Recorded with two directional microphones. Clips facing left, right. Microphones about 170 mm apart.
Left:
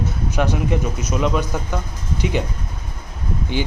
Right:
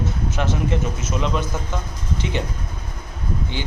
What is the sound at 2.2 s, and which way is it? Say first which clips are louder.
Speech: left 5 dB; 15° left (ahead or behind).